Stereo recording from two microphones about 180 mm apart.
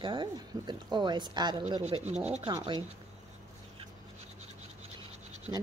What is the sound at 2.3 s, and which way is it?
Speech, 35° right (ahead or behind).